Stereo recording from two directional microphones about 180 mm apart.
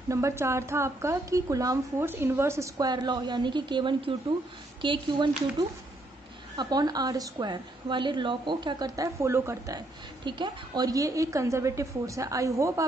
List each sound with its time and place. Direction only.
0.1 s a woman's voice: 15° right (ahead or behind)